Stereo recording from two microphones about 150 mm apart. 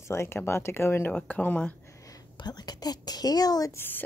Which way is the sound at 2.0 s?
25° left (ahead or behind).